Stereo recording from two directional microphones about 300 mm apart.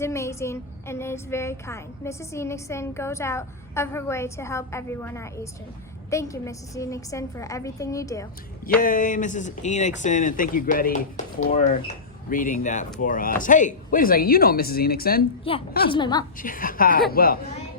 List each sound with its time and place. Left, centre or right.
0.0 s a woman's voice: centre
8.8 s speech: left
15.9 s a woman's voice: centre
16.4 s speech: left